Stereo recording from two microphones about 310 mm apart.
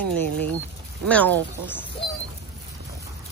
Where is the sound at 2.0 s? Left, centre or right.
Centre.